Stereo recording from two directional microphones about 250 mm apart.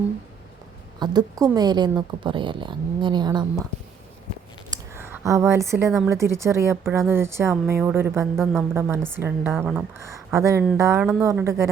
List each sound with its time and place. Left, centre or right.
0.9 s a woman's voice: centre
4.7 s a sound: centre
6.1 s a woman's voice: centre